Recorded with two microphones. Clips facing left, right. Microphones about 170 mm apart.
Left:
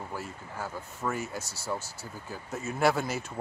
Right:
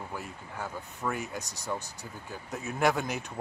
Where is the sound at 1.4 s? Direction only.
15° right (ahead or behind).